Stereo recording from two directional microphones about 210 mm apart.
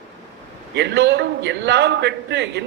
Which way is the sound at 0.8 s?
55° right (ahead or behind).